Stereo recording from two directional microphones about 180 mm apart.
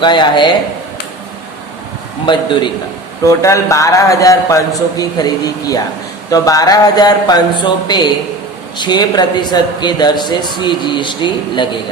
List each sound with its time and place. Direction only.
0.0 s a man's voice: 25° left (ahead or behind)
2.2 s a man's voice: 25° left (ahead or behind)